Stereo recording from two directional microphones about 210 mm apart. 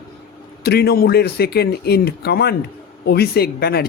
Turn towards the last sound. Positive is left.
turn(degrees=50)  # may be behind; listen again after turning